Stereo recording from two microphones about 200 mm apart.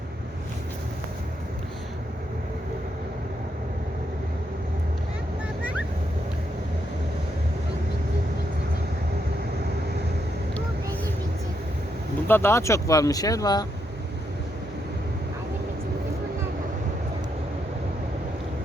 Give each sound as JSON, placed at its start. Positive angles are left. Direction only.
{"t": 12.3, "sound": "speech", "side_deg": 10}